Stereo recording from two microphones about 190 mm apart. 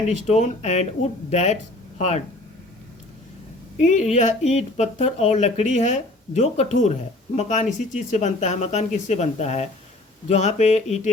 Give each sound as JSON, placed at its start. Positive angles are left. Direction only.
{"t": 0.3, "sound": "speech", "side_deg": 35}
{"t": 3.8, "sound": "speech", "side_deg": 35}